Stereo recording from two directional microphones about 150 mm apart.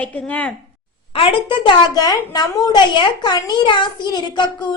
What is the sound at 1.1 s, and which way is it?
A woman's voice, 35° left (ahead or behind).